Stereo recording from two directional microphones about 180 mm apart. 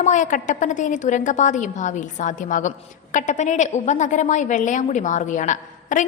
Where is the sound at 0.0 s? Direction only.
45° left (ahead or behind).